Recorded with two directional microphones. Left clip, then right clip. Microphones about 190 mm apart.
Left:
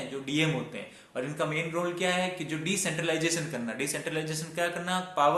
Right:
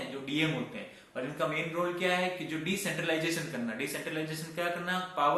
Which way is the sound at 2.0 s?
55° left (ahead or behind).